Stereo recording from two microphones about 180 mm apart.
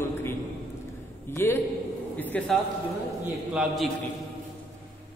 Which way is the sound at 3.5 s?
Centre (ahead or behind).